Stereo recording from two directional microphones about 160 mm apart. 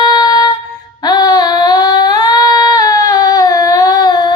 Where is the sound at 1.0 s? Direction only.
25° left (ahead or behind).